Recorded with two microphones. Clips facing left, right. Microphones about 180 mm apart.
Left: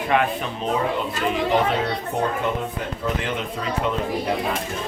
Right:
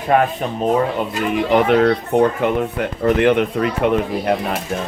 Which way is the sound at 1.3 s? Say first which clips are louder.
Right 6 dB; 65° right (ahead or behind).